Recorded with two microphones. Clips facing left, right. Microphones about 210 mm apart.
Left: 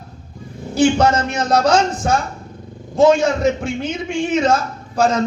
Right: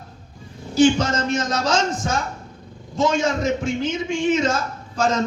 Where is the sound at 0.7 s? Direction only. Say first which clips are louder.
Left 2 dB; 60° left (ahead or behind).